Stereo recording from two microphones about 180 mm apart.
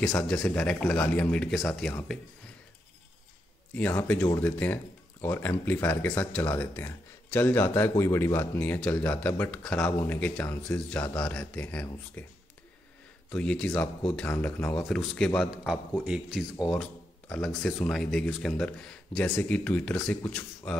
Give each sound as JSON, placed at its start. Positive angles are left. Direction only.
{"t": 0.0, "sound": "speech", "side_deg": 5}
{"t": 3.7, "sound": "speech", "side_deg": 10}
{"t": 13.3, "sound": "speech", "side_deg": 5}